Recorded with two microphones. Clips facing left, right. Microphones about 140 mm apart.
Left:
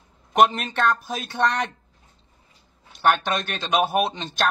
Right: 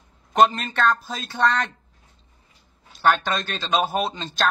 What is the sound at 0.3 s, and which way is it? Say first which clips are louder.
Speech: even; 15° left (ahead or behind).